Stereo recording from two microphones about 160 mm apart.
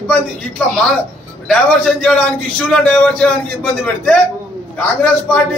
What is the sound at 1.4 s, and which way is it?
A man's voice, 5° left (ahead or behind).